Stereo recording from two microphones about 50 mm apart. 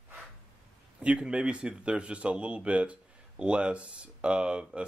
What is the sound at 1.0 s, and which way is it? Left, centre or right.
Speech, right.